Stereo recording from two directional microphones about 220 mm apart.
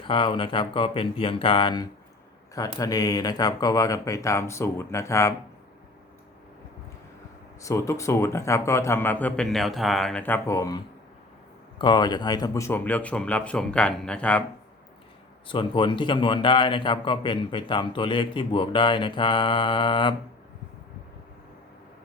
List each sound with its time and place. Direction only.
0.0 s a man's voice: 20° left (ahead or behind)
7.6 s speech: 15° left (ahead or behind)
15.4 s a man's voice: 20° left (ahead or behind)